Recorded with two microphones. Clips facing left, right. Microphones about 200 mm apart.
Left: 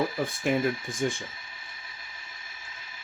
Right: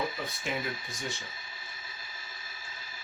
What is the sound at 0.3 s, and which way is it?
Speech, 50° left (ahead or behind).